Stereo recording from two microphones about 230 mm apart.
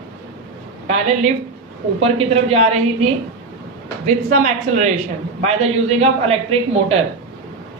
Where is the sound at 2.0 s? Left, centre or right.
Right.